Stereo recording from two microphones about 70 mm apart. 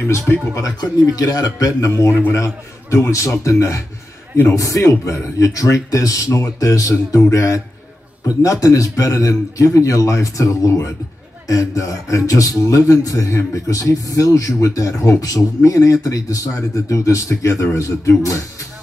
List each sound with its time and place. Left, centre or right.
0.6 s a man's voice: left
1.9 s a man's voice: left
2.3 s speech: left